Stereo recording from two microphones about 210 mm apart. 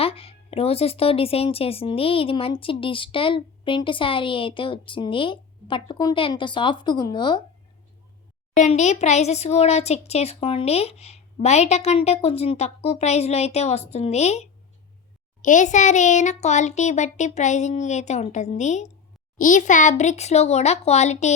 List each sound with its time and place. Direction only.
0.0 s speech: 25° left (ahead or behind)
8.5 s a child's voice: 35° left (ahead or behind)